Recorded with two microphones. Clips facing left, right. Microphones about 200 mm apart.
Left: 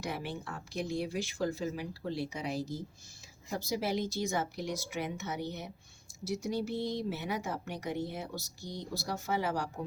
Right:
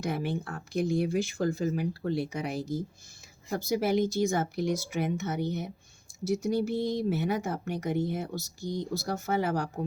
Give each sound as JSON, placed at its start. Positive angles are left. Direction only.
{"t": 0.0, "sound": "speech", "side_deg": -50}